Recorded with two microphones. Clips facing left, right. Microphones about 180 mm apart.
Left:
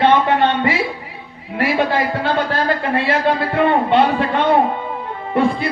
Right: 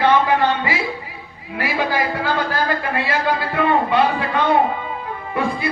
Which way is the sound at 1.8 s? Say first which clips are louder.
Left 2 dB; 30° left (ahead or behind).